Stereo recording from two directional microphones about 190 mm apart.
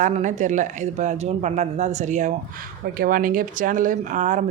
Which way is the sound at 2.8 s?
50° right (ahead or behind).